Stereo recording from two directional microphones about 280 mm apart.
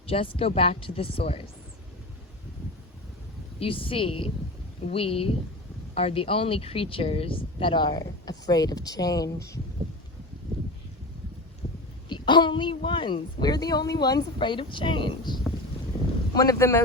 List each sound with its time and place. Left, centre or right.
0.1 s speech: centre
3.6 s speech: centre
12.0 s speech: centre